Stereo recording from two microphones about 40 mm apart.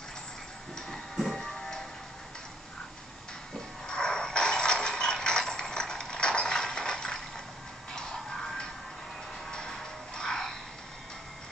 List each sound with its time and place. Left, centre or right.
0.7 s music: centre
3.8 s mechanisms: centre
9.5 s music: centre